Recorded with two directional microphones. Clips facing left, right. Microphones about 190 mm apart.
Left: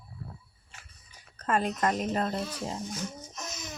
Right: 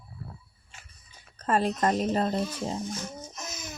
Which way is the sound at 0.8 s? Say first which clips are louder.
Right 2 dB; 30° right (ahead or behind).